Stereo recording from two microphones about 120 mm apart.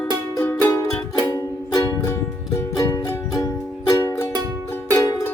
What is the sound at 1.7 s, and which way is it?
Music, 30° left (ahead or behind).